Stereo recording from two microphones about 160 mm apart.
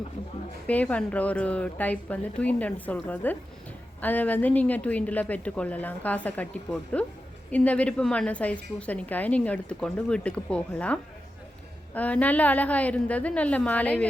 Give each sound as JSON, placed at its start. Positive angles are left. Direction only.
{"t": 0.7, "sound": "a woman's voice", "side_deg": 10}